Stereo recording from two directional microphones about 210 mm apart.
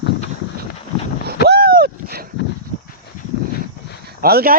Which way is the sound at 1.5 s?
45° right (ahead or behind).